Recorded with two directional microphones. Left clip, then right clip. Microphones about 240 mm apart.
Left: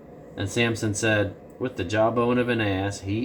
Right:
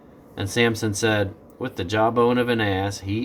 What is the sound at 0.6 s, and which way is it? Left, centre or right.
Speech, right.